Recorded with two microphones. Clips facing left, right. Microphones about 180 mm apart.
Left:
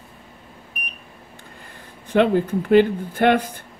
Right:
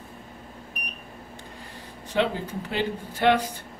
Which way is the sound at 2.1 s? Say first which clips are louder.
Left 8 dB; 55° left (ahead or behind).